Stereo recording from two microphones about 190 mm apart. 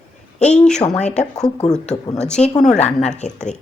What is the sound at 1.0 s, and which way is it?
Speech, 35° left (ahead or behind).